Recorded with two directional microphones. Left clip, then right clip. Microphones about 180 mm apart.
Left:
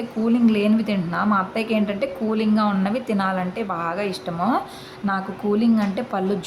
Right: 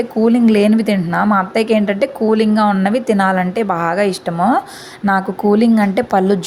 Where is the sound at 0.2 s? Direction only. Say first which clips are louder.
Right 8 dB; 35° right (ahead or behind).